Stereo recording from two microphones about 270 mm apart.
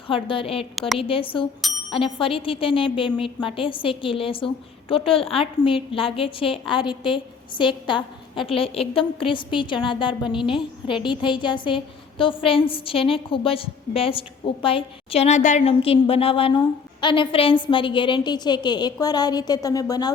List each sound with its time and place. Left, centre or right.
0.1 s a woman's voice: centre